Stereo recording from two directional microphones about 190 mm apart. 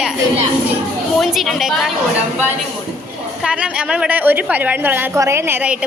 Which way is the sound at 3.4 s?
5° right (ahead or behind).